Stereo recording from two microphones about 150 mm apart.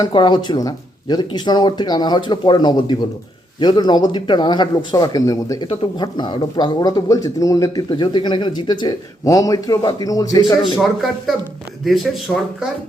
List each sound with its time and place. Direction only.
0.0 s speech: 30° left (ahead or behind)
11.9 s speech: centre (ahead or behind)